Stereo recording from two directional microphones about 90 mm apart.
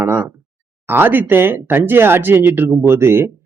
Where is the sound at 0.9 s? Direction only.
20° right (ahead or behind).